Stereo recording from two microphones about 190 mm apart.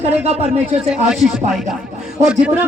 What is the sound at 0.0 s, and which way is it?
Speech, 35° right (ahead or behind).